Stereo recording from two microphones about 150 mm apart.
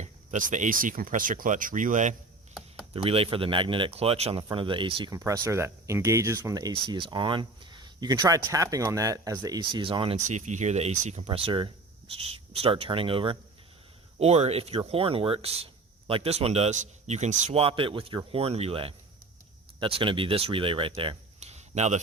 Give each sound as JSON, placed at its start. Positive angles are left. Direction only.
{"t": 0.0, "sound": "speech", "side_deg": -55}
{"t": 2.9, "sound": "speech", "side_deg": -40}
{"t": 5.1, "sound": "speech", "side_deg": -20}
{"t": 10.2, "sound": "speech", "side_deg": -55}